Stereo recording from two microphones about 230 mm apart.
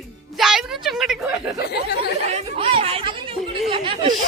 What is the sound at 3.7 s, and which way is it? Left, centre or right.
Speech, right.